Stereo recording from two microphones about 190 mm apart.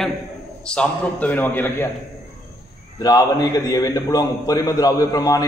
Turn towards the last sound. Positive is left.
turn(degrees=20)  # may be behind; listen again after turning